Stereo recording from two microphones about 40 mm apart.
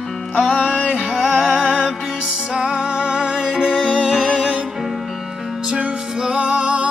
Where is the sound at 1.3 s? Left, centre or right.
Centre.